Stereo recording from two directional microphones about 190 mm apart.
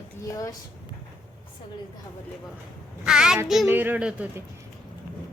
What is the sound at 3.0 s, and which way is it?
A woman's voice, 5° right (ahead or behind).